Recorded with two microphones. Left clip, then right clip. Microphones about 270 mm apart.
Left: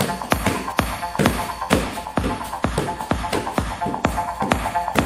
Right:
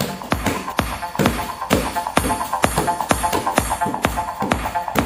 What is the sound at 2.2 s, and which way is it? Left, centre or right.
Music, right.